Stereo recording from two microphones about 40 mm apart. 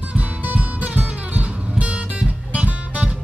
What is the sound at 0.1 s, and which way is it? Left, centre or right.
Music, right.